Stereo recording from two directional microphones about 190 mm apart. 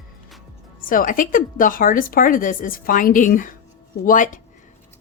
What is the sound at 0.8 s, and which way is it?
Speech, 45° left (ahead or behind).